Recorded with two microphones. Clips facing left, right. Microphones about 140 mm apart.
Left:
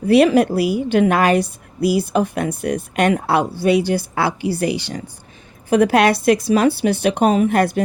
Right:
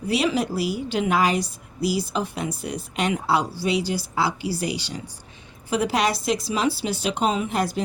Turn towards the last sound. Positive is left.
turn(degrees=60)  # may be behind; listen again after turning